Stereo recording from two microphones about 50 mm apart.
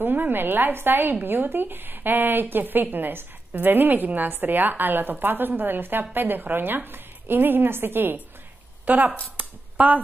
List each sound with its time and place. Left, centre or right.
0.0 s a woman's voice: right
8.8 s speech: right
9.4 s a sound: right